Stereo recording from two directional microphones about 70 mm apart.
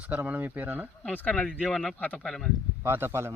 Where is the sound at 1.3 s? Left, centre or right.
Centre.